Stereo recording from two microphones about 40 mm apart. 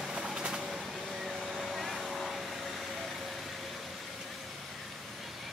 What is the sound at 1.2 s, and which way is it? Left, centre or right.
Vehicle, centre.